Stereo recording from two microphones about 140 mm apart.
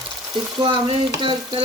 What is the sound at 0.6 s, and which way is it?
Speech, 40° right (ahead or behind).